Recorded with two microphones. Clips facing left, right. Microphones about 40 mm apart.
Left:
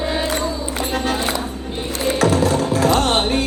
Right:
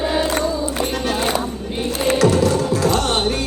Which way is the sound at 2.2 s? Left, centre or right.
Left.